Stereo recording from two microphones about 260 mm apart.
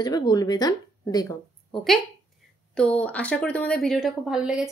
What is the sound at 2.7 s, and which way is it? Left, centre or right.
A woman's voice, centre.